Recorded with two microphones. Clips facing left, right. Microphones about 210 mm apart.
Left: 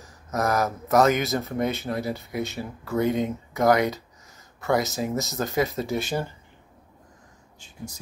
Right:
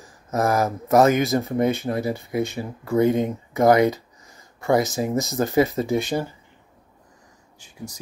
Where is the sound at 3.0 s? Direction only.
50° right (ahead or behind).